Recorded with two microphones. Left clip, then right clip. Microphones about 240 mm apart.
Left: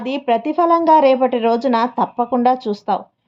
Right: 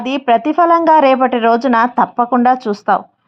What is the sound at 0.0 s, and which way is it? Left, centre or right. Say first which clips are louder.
A woman's voice: right 5 dB; right.